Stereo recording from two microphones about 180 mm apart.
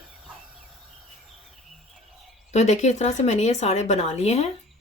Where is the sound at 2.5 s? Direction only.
40° left (ahead or behind).